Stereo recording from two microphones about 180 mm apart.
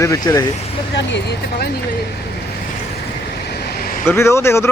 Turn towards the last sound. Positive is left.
turn(degrees=15)  # may be behind; listen again after turning